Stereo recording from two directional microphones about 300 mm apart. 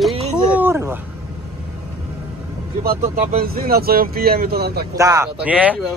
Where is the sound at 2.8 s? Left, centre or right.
Right.